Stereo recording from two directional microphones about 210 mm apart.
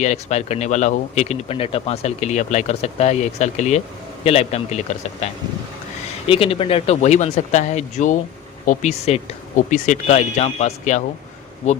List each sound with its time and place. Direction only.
0.0 s speech: 35° left (ahead or behind)